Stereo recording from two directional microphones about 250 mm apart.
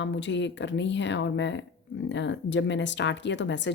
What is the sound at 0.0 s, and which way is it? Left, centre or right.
A woman's voice, left.